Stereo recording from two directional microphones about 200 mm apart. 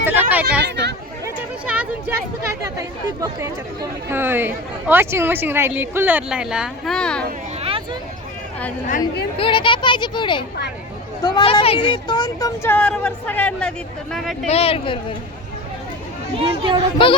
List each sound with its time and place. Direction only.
0.0 s a woman's voice: 10° right (ahead or behind)
0.6 s speech: 55° right (ahead or behind)
1.2 s a sound: 5° right (ahead or behind)
2.7 s a woman's voice: 15° right (ahead or behind); by 7.3 s 5° left (ahead or behind)
9.4 s speech: 25° left (ahead or behind); by 14.3 s 5° left (ahead or behind)
14.4 s speech: 30° left (ahead or behind)
16.4 s speech: 25° right (ahead or behind)